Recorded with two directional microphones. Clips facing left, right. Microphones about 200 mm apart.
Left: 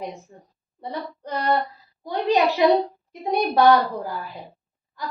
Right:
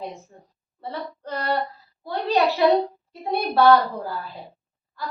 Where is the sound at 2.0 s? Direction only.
15° left (ahead or behind).